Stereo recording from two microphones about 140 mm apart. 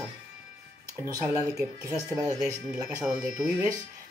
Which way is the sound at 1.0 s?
20° right (ahead or behind).